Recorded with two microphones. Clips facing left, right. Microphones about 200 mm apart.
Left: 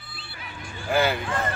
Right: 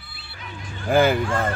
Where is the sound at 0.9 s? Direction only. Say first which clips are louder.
Right 5 dB; 50° right (ahead or behind).